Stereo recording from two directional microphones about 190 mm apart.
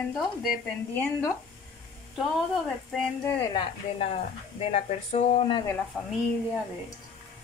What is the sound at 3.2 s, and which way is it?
Speech, 30° left (ahead or behind).